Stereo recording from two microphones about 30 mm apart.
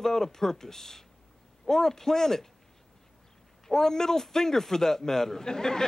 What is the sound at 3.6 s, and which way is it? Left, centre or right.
Speech, centre.